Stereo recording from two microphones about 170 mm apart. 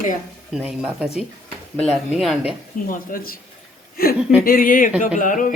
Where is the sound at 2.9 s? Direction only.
55° left (ahead or behind).